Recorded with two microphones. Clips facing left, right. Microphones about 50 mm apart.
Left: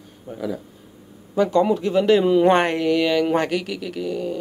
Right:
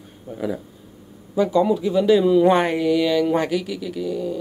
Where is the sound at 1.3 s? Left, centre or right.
Left.